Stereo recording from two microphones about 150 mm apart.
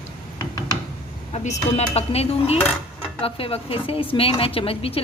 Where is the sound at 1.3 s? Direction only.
45° left (ahead or behind).